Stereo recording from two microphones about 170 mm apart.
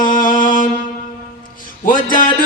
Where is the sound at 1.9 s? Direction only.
50° left (ahead or behind).